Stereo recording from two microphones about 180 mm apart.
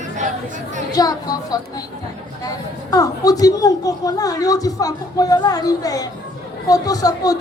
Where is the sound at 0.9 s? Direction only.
20° left (ahead or behind).